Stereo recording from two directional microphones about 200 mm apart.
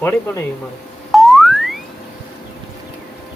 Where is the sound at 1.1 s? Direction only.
Centre (ahead or behind).